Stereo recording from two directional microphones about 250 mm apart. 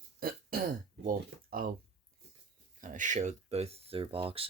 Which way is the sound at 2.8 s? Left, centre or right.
Right.